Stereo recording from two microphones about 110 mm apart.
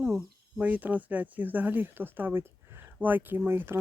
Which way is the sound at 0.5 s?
15° right (ahead or behind).